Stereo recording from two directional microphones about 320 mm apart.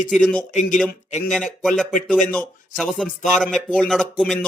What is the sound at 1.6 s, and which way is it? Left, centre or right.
Speech, centre.